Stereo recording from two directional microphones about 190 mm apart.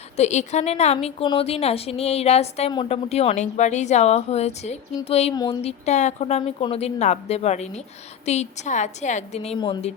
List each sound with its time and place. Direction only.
0.2 s a woman's voice: 35° left (ahead or behind)
5.3 s a sound: 20° left (ahead or behind)
5.6 s a woman's voice: 35° left (ahead or behind)